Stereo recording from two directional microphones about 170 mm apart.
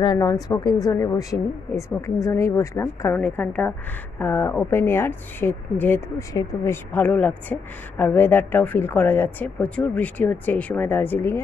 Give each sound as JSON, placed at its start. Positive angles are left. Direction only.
{"t": 0.0, "sound": "speech", "side_deg": 25}
{"t": 2.2, "sound": "a woman's voice", "side_deg": 20}